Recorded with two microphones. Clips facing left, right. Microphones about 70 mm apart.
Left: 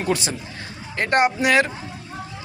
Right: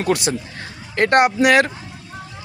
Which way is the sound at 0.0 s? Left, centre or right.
Right.